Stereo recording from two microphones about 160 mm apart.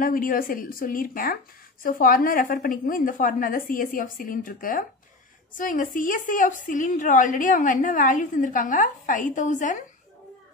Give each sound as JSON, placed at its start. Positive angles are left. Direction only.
{"t": 0.0, "sound": "speech", "side_deg": 60}